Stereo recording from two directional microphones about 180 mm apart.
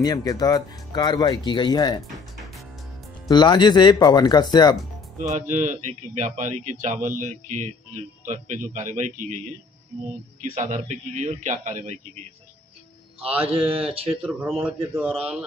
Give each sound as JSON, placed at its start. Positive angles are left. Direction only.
{"t": 0.0, "sound": "speech", "side_deg": 20}
{"t": 3.3, "sound": "speech", "side_deg": 25}
{"t": 5.2, "sound": "a man's voice", "side_deg": -40}
{"t": 10.4, "sound": "a man's voice", "side_deg": -45}
{"t": 13.5, "sound": "speech", "side_deg": -30}
{"t": 14.6, "sound": "a man's voice", "side_deg": -15}